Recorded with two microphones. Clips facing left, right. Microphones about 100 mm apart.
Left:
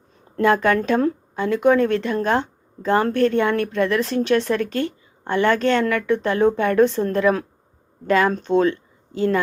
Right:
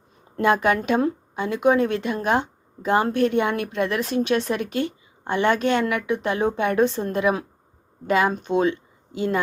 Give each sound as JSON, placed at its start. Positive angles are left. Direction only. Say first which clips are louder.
{"t": 0.4, "sound": "speech", "louder": "left 2 dB", "side_deg": -20}